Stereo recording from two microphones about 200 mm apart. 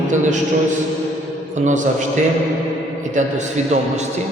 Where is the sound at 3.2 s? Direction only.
35° right (ahead or behind).